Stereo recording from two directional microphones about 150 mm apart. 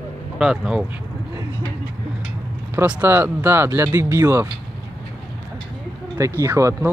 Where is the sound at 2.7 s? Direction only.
10° right (ahead or behind).